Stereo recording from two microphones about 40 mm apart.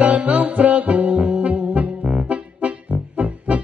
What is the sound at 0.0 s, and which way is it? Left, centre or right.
Music, right.